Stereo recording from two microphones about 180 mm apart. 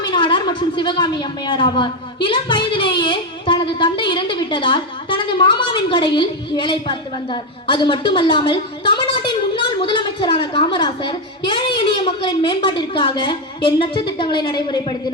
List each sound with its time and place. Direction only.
0.0 s a woman's voice: 25° left (ahead or behind)